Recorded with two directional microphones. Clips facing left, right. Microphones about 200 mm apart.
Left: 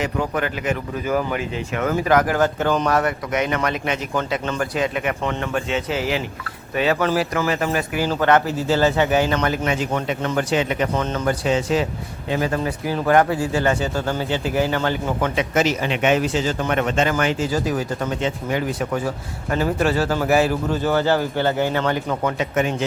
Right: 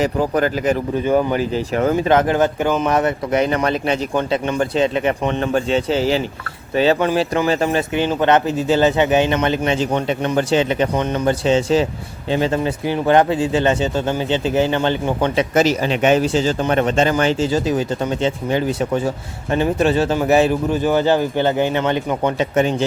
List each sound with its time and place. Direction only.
0.0 s speech: 35° right (ahead or behind)
4.1 s speech: 20° right (ahead or behind)
10.9 s speech: 15° right (ahead or behind)
11.3 s speech: 25° right (ahead or behind)